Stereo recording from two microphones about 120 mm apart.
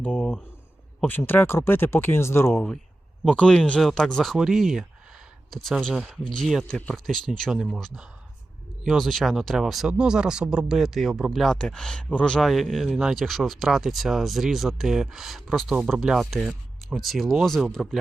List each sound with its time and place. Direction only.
0.0 s a sound: 10° left (ahead or behind)
1.0 s speech: 15° left (ahead or behind)
3.2 s speech: 10° left (ahead or behind)